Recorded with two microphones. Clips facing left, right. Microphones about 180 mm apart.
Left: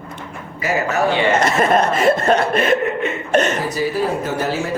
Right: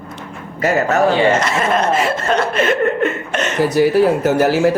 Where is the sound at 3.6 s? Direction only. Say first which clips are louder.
Right 8 dB; 70° right (ahead or behind).